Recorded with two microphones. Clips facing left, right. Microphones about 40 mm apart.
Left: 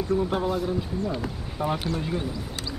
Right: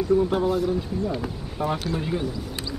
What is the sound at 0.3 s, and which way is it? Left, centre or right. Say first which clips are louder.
Speech: right 3 dB; centre.